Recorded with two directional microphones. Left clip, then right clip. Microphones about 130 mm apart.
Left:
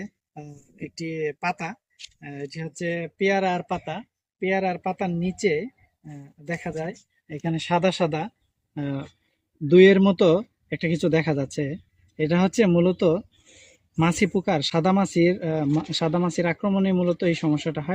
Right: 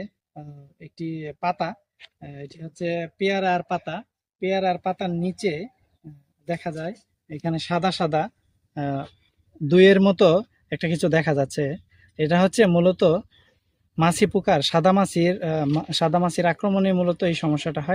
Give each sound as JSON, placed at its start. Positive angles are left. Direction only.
{"t": 0.9, "sound": "speech", "side_deg": -10}
{"t": 4.4, "sound": "speech", "side_deg": -10}
{"t": 6.6, "sound": "speech", "side_deg": -15}
{"t": 8.7, "sound": "speech", "side_deg": -45}
{"t": 9.6, "sound": "speech", "side_deg": -60}